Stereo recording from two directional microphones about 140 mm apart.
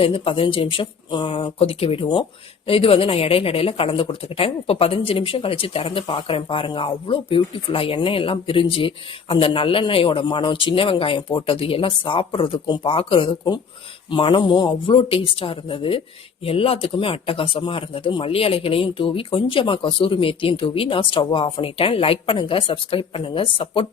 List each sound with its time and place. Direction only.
0.0 s speech: 40° left (ahead or behind)